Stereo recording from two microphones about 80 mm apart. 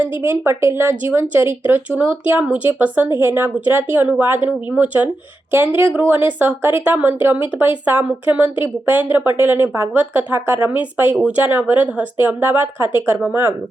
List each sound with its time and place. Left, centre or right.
0.0 s speech: right